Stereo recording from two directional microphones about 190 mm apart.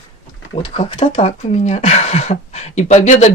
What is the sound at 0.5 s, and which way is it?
Speech, 30° left (ahead or behind).